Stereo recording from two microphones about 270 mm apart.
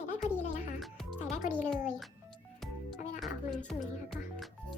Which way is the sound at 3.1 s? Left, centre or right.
Centre.